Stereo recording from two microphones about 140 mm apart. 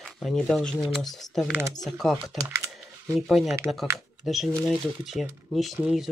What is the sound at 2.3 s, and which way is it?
Speech, 20° right (ahead or behind).